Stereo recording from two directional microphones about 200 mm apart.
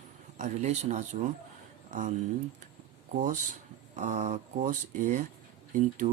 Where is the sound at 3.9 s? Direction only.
40° right (ahead or behind).